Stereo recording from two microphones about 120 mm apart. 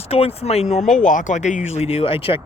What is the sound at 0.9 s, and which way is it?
Speech, 90° left.